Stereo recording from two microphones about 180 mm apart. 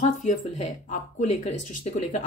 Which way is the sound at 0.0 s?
45° left (ahead or behind).